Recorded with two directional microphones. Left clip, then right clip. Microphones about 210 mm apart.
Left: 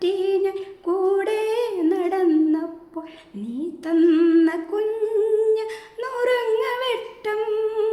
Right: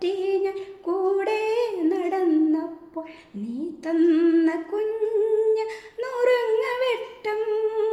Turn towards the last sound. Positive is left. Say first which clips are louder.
# left 1 dB
turn(degrees=15)  # may be behind; listen again after turning